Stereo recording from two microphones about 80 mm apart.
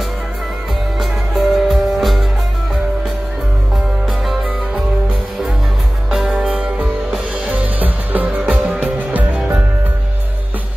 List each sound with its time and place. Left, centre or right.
0.9 s music: centre
6.0 s music: centre